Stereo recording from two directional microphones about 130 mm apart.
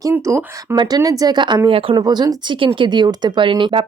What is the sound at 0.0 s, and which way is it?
Speech, 20° right (ahead or behind).